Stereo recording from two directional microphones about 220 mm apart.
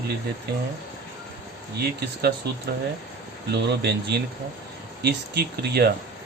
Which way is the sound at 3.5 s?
50° right (ahead or behind).